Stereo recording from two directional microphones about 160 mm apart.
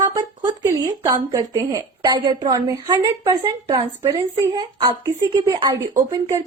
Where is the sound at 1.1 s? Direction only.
30° right (ahead or behind).